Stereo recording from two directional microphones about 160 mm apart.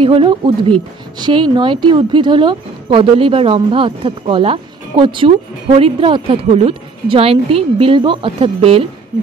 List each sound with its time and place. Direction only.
0.0 s a woman's voice: 35° right (ahead or behind)